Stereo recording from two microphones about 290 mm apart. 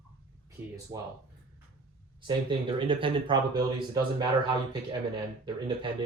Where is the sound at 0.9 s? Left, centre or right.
Centre.